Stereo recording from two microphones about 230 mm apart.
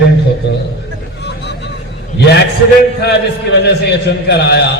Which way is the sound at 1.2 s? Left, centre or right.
Left.